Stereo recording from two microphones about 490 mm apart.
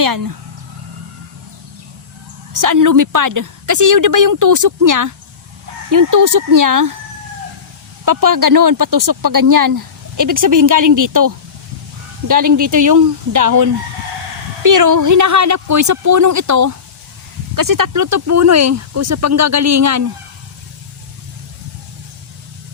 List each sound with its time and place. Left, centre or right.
0.0 s speech: right
2.5 s speech: right
8.0 s speech: right